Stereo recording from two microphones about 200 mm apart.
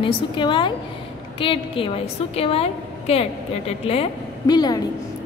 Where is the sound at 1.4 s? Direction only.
25° left (ahead or behind).